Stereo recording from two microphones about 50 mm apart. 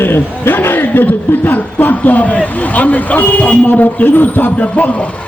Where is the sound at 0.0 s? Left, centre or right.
Left.